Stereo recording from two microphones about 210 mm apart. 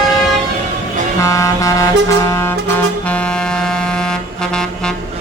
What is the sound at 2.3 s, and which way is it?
Music, 10° left (ahead or behind).